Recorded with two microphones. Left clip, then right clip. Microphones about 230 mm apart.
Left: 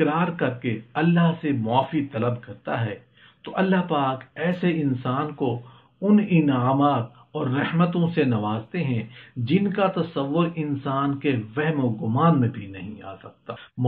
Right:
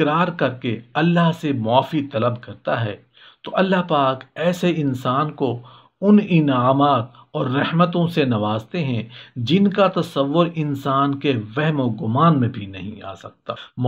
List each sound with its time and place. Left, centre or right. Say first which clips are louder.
0.0 s speech: right 4 dB; right